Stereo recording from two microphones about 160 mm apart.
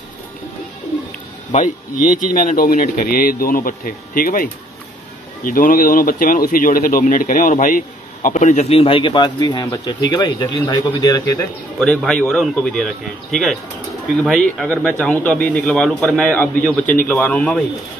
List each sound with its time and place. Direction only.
1.5 s a man's voice: 55° left (ahead or behind); by 11.4 s 20° left (ahead or behind)
11.8 s speech: 5° left (ahead or behind)